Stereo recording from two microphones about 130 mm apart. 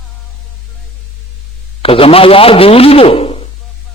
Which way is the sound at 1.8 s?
45° left (ahead or behind).